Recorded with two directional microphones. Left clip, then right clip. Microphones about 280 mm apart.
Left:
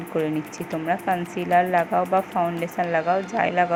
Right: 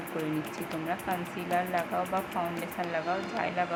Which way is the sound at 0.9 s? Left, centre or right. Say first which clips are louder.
Left 11 dB; centre.